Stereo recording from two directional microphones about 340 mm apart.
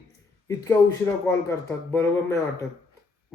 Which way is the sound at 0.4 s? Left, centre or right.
Centre.